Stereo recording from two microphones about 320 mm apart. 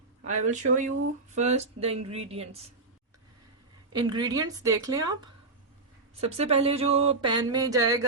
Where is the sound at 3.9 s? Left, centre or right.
Centre.